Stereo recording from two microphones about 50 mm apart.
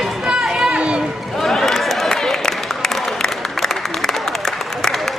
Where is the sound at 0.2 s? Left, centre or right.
Centre.